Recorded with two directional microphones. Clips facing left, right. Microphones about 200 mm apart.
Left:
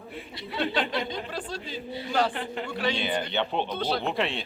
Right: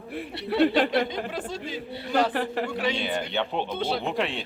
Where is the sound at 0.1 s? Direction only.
65° right (ahead or behind).